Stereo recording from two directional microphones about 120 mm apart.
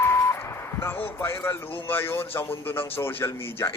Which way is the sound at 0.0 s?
20° left (ahead or behind).